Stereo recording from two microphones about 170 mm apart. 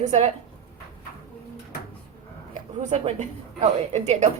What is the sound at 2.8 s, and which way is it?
A woman's voice, 45° right (ahead or behind).